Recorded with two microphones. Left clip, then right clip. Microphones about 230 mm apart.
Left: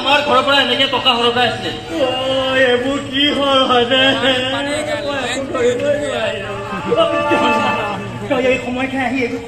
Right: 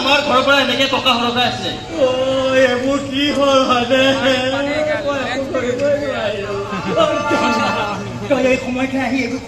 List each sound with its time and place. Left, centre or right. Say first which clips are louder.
0.1 s a man's voice: left 1 dB; right
2.4 s a man's voice: left 1 dB; right
7.0 s a man's voice: even; right